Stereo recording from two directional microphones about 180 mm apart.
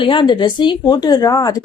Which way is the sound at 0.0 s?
25° left (ahead or behind).